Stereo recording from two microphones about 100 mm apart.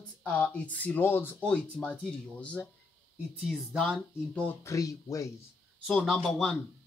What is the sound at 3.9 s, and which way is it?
Speech, 10° left (ahead or behind).